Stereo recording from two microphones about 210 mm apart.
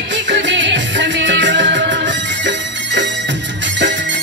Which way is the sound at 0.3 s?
60° right (ahead or behind).